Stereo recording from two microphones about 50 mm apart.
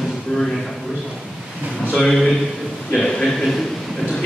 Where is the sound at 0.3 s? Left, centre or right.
Centre.